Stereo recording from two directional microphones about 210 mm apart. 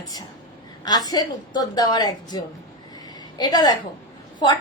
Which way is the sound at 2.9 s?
20° left (ahead or behind).